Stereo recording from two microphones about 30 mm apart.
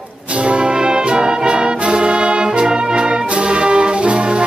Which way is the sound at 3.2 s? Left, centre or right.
Right.